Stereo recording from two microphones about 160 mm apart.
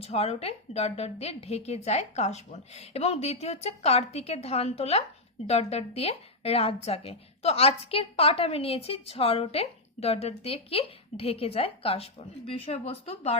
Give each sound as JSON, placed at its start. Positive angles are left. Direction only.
{"t": 0.0, "sound": "a woman's voice", "side_deg": 40}